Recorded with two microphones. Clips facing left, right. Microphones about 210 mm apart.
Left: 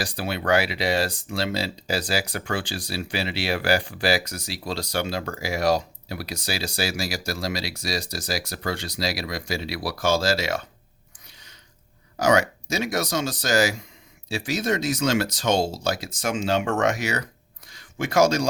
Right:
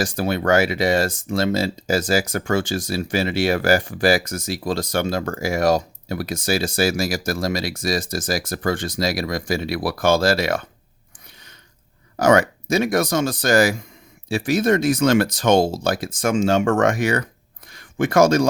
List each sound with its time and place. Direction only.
0.0 s speech: 45° right (ahead or behind)
12.1 s speech: 55° right (ahead or behind)
17.7 s a sound: 55° right (ahead or behind)